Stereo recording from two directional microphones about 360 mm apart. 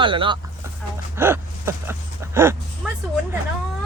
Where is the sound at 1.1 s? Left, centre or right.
Centre.